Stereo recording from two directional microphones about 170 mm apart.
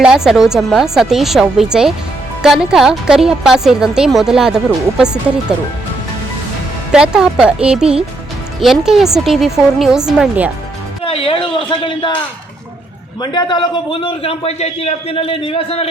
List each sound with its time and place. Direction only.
0.0 s a woman's voice: 5° right (ahead or behind)
6.9 s a woman's voice: 5° right (ahead or behind)
11.0 s a man's voice: 35° left (ahead or behind)
13.2 s a man's voice: 25° left (ahead or behind)